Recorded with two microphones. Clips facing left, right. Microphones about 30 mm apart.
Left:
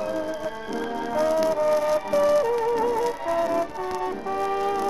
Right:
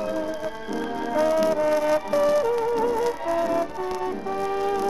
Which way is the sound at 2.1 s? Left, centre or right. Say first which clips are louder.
Left 2 dB; centre.